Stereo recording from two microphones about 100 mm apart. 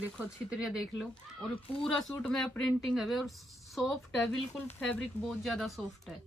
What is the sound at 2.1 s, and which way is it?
Speech, 15° left (ahead or behind).